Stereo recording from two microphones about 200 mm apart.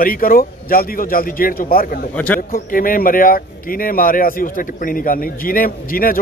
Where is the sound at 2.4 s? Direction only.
45° left (ahead or behind).